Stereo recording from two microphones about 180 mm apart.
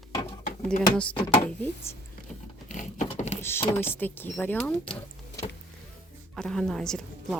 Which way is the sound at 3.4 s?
15° left (ahead or behind).